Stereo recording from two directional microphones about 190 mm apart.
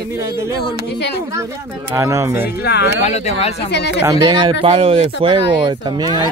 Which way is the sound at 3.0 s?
35° left (ahead or behind).